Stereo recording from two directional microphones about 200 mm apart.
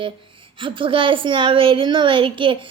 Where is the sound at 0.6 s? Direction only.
25° right (ahead or behind).